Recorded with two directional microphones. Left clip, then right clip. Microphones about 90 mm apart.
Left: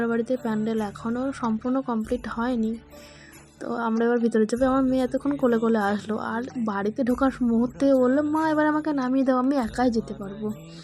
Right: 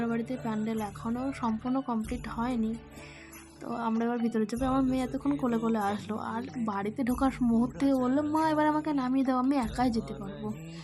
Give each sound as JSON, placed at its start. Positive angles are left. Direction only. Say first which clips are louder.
{"t": 0.1, "sound": "a woman's voice", "louder": "left 8 dB", "side_deg": 40}
{"t": 9.7, "sound": "speech", "louder": "left 6 dB", "side_deg": 25}